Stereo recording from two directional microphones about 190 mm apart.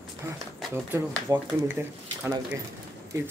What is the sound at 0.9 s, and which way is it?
A man's voice, 15° right (ahead or behind).